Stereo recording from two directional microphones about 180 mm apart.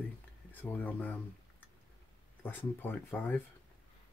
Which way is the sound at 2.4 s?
10° left (ahead or behind).